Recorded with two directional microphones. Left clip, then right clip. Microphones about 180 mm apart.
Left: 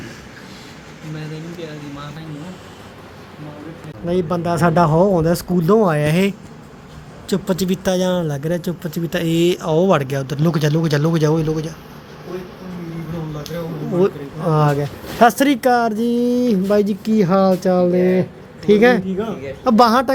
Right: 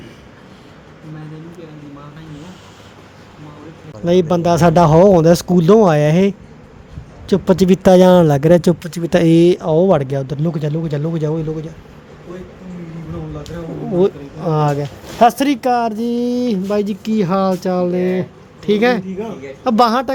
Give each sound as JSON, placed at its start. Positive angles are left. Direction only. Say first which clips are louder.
{"t": 4.0, "sound": "speech", "louder": "right 6 dB", "side_deg": -35}
{"t": 14.0, "sound": "a man's voice", "louder": "right 2 dB", "side_deg": -10}